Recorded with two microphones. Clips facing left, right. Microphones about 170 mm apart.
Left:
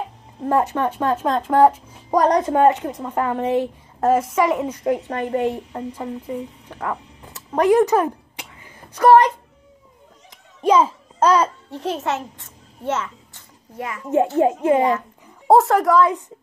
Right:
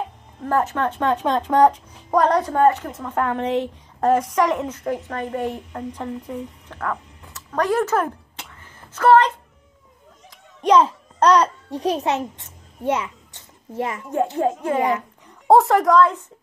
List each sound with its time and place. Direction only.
0.4 s a child's voice: 15° left (ahead or behind)
10.6 s a child's voice: 5° left (ahead or behind)
11.7 s a child's voice: 15° right (ahead or behind)
13.7 s a child's voice: 30° right (ahead or behind)
14.4 s a child's voice: 20° left (ahead or behind)
14.8 s a child's voice: 15° right (ahead or behind)
15.4 s a woman's voice: centre (ahead or behind)